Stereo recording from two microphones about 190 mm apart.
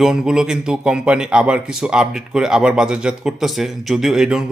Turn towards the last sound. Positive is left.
turn(degrees=-5)  # may be behind; listen again after turning